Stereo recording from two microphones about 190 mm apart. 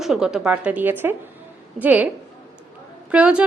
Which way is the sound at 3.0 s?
5° right (ahead or behind).